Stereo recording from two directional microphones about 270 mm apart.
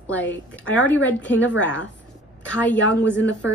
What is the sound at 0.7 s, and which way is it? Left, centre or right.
Speech, left.